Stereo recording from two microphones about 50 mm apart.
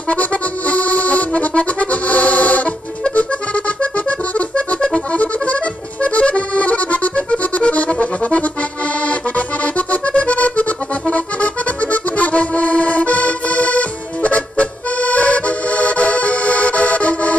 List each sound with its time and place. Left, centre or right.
0.1 s accordion: left